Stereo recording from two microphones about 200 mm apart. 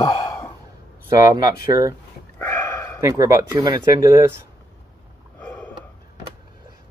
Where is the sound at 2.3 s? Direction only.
10° left (ahead or behind).